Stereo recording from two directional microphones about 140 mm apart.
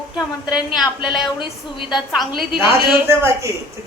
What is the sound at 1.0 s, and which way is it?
Speech, 35° left (ahead or behind).